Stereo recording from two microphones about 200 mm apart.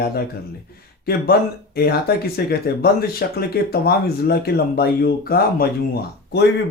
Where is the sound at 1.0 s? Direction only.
50° left (ahead or behind).